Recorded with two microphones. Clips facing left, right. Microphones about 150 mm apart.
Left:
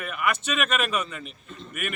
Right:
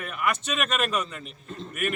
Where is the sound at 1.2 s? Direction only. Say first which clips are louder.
Right 2 dB; 35° right (ahead or behind).